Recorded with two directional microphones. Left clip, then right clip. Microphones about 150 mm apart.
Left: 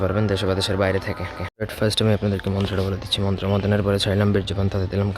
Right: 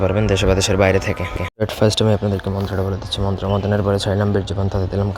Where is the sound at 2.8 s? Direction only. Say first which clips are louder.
Right 1 dB; 10° left (ahead or behind).